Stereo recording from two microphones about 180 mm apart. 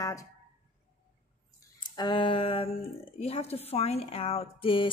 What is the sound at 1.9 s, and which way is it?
A woman's voice, 25° left (ahead or behind).